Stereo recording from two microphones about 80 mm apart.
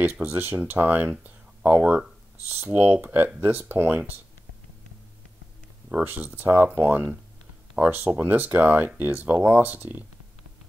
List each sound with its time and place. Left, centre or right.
0.0 s speech: centre
6.0 s speech: right